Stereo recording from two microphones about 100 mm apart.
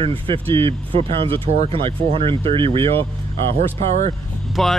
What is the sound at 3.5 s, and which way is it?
Speech, 90° right.